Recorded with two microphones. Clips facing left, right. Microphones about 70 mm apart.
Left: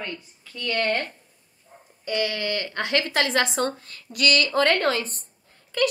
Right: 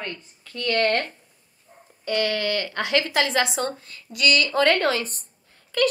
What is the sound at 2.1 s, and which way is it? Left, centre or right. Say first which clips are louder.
Speech: right 2 dB; centre.